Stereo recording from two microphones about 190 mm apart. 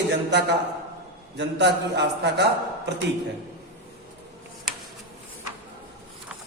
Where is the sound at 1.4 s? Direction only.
65° right (ahead or behind).